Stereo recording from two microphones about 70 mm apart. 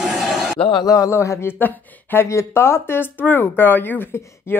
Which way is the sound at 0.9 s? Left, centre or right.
Left.